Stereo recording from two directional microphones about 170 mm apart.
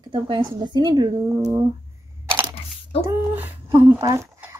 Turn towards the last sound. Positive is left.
turn(degrees=-20)  # may be behind; listen again after turning